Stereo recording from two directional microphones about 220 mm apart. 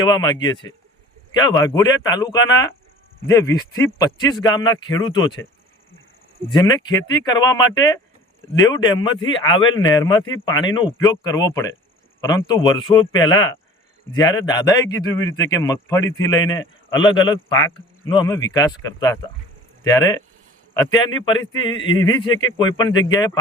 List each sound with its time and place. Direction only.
0.0 s a man's voice: 20° left (ahead or behind)
6.5 s a man's voice: 20° left (ahead or behind)